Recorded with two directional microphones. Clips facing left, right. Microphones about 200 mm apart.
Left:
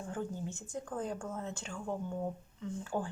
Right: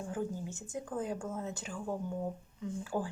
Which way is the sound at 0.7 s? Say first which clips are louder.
Right 2 dB; 20° right (ahead or behind).